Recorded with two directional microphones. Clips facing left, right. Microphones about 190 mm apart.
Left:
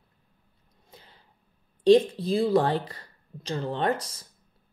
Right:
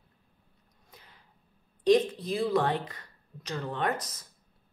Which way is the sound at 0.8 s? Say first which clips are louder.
Left 4 dB; 30° left (ahead or behind).